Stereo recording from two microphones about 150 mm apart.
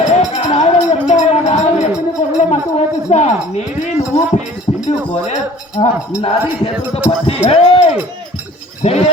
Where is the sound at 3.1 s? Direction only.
50° left (ahead or behind).